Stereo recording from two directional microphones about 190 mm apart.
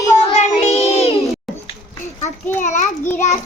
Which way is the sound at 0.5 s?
30° left (ahead or behind).